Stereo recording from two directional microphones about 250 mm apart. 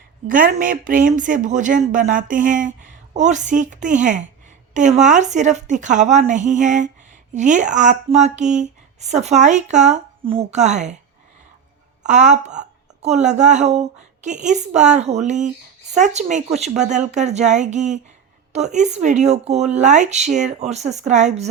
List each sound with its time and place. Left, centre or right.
0.3 s speech: right
12.0 s speech: right